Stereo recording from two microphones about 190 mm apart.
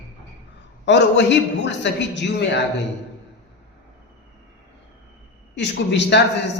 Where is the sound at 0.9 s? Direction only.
70° left (ahead or behind).